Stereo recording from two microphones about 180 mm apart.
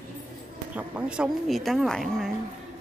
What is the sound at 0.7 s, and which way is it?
A woman's voice, 5° right (ahead or behind).